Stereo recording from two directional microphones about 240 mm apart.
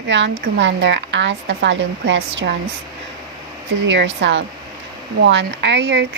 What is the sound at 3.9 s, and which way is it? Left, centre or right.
Speech, right.